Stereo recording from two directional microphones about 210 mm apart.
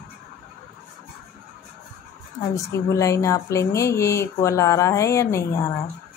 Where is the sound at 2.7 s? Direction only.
15° left (ahead or behind).